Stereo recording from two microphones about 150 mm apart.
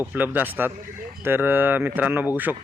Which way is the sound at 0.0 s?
10° right (ahead or behind).